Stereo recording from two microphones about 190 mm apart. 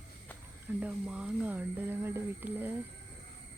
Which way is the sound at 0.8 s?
5° right (ahead or behind).